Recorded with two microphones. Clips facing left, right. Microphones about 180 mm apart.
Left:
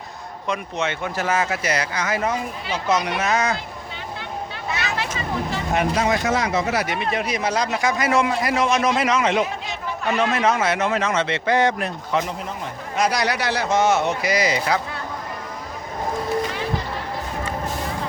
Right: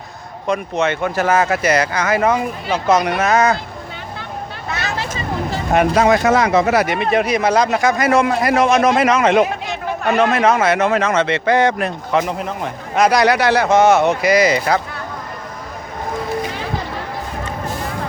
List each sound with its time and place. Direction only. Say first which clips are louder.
0.4 s speech: right 7 dB; 55° right (ahead or behind)
2.6 s speech: right 6 dB; 50° right (ahead or behind)
4.7 s vehicle: right 2 dB; 40° right (ahead or behind)
5.7 s speech: right 8 dB; 75° right (ahead or behind)
6.2 s speech: right 7 dB; 55° right (ahead or behind)